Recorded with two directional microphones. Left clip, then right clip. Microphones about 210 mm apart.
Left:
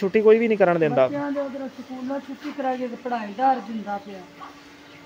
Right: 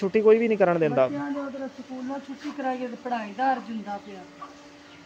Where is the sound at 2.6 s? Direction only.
15° right (ahead or behind).